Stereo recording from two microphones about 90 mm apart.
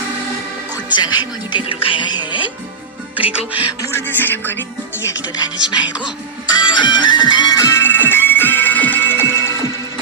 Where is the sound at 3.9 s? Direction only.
20° left (ahead or behind).